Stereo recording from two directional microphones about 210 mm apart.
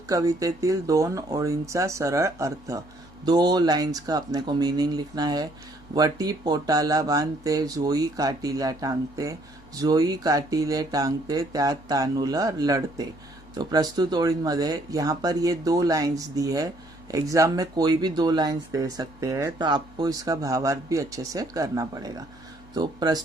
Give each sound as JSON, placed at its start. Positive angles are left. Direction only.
{"t": 0.1, "sound": "speech", "side_deg": -15}